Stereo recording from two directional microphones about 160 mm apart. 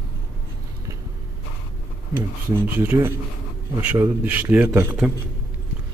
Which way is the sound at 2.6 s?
10° right (ahead or behind).